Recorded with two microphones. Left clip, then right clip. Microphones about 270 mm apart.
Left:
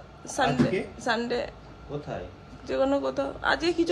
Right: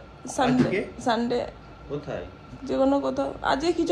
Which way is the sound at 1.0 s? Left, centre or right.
Right.